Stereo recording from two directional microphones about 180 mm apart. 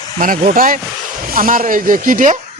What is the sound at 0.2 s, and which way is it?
Speech, 50° right (ahead or behind).